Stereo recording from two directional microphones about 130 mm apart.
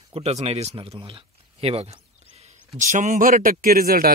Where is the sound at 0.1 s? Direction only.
55° right (ahead or behind).